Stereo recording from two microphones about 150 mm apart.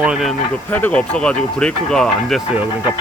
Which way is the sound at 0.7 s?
10° left (ahead or behind).